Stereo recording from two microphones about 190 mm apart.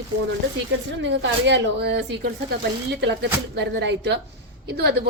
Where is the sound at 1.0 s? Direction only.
65° right (ahead or behind).